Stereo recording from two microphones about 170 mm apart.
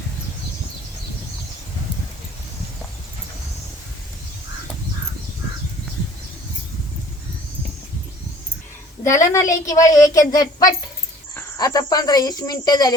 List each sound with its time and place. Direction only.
9.3 s speech: 20° left (ahead or behind)